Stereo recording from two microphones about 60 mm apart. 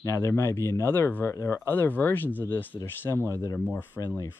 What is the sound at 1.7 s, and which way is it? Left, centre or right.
Speech, left.